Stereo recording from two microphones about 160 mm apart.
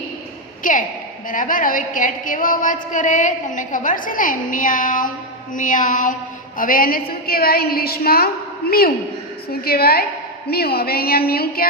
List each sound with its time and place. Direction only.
0.6 s a sound: 55° left (ahead or behind)
1.3 s a woman's voice: 55° left (ahead or behind)
9.5 s a woman's voice: 75° left (ahead or behind)